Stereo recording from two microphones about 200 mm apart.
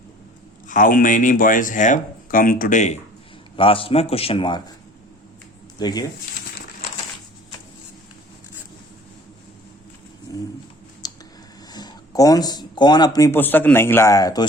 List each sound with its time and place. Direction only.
0.7 s speech: 40° left (ahead or behind)
3.5 s a man's voice: 25° left (ahead or behind)
5.8 s a man's voice: 20° left (ahead or behind)
10.3 s pigeon: 20° left (ahead or behind)
11.0 s clicking: 20° left (ahead or behind)
11.7 s speech: 20° left (ahead or behind)